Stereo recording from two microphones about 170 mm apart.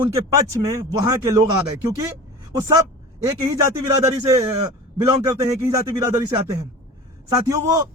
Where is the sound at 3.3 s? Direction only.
20° right (ahead or behind).